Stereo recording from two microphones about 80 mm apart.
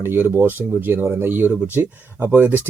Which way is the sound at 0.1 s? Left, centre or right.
Right.